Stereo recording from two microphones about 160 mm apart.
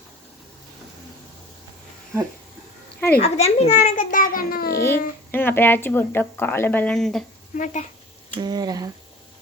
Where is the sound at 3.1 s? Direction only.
40° left (ahead or behind).